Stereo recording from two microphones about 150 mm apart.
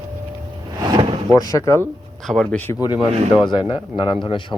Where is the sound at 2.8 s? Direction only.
30° left (ahead or behind).